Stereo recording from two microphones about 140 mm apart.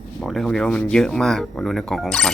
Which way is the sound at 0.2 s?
Centre (ahead or behind).